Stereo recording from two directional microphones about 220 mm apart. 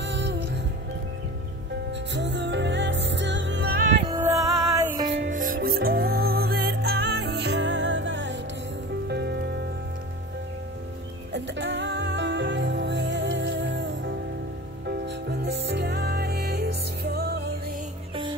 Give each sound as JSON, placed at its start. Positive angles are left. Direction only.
{"t": 0.0, "sound": "music", "side_deg": -55}
{"t": 2.1, "sound": "music", "side_deg": -55}
{"t": 4.1, "sound": "music", "side_deg": -15}
{"t": 5.2, "sound": "music", "side_deg": -35}
{"t": 11.3, "sound": "music", "side_deg": -55}